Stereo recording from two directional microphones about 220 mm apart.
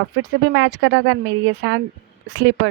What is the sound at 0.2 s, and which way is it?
Speech, 55° right (ahead or behind).